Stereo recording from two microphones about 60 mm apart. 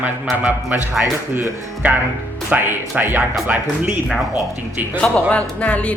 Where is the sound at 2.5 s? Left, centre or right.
Right.